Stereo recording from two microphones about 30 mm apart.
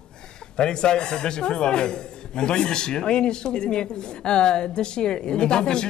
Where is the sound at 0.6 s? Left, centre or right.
Left.